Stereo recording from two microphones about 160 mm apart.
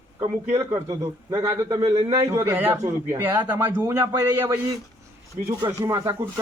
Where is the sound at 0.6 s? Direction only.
20° right (ahead or behind).